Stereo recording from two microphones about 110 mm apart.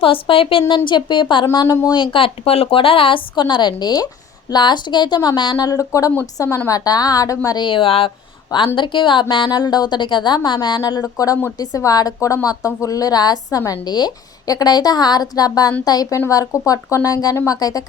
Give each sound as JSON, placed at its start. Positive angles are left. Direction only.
{"t": 0.0, "sound": "a woman's voice", "side_deg": 55}
{"t": 0.7, "sound": "speech", "side_deg": 45}
{"t": 1.5, "sound": "a woman's voice", "side_deg": 30}
{"t": 2.0, "sound": "a woman's voice", "side_deg": 55}